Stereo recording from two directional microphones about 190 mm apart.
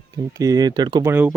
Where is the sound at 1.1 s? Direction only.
10° right (ahead or behind).